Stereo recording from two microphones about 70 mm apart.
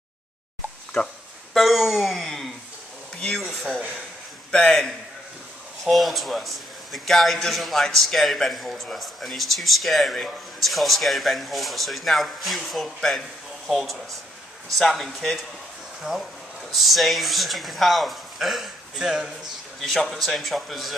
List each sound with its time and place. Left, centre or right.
1.0 s speech: left
1.5 s speech: centre
3.2 s speech: centre
4.5 s a man's voice: centre
5.9 s a man's voice: centre
19.8 s a man's voice: centre